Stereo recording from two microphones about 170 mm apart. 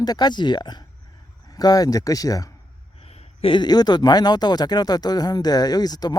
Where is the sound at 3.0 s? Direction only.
35° left (ahead or behind).